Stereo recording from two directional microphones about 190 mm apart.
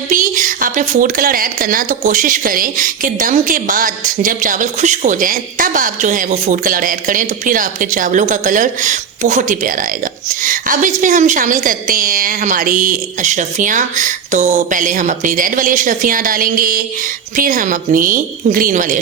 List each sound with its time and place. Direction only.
0.1 s a woman's voice: 45° right (ahead or behind)